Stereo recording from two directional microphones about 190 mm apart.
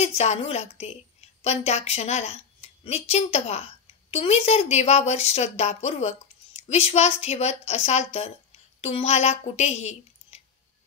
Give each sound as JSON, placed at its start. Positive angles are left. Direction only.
{"t": 0.0, "sound": "a woman's voice", "side_deg": 35}